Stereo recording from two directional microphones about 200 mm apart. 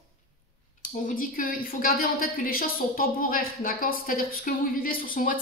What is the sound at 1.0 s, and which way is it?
A woman's voice, 45° left (ahead or behind).